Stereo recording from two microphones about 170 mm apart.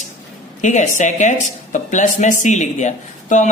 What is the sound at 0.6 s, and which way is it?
Speech, 45° left (ahead or behind).